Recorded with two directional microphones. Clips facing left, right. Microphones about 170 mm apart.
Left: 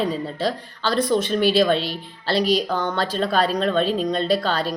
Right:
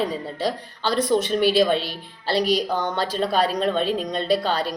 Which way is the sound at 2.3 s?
45° right (ahead or behind).